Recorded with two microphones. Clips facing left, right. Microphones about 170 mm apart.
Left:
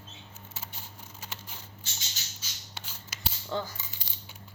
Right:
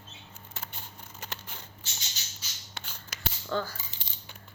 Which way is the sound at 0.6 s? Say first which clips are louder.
Right 2 dB; 60° right (ahead or behind).